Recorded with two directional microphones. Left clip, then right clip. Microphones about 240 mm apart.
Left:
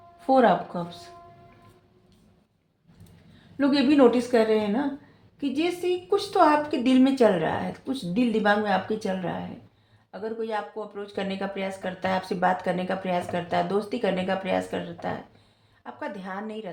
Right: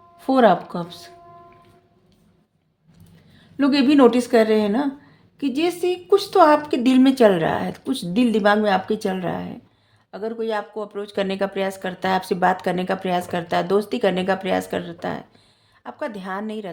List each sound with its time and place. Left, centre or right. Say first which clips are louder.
0.2 s speech: right 4 dB; right
3.6 s speech: right 4 dB; right